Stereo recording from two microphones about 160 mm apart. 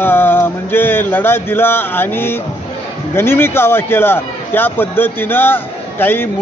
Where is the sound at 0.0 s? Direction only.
15° left (ahead or behind).